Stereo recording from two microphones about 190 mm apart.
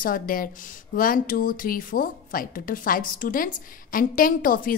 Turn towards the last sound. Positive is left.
turn(degrees=45)  # may be behind; listen again after turning